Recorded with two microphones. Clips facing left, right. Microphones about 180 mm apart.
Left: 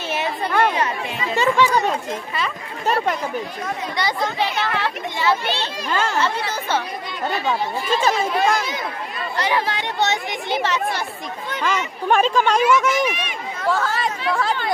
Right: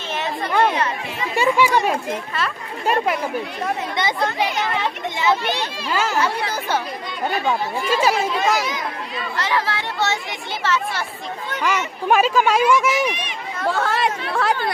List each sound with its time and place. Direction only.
1.3 s a child's voice: 10° right (ahead or behind)
3.9 s a child's voice: 20° right (ahead or behind)
7.9 s a child's voice: 10° right (ahead or behind)
9.4 s speech: 20° left (ahead or behind)
11.6 s a child's voice: 5° right (ahead or behind)
13.6 s speech: 60° right (ahead or behind)